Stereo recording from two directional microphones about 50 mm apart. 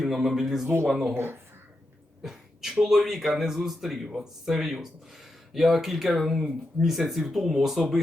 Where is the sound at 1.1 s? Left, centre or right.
Right.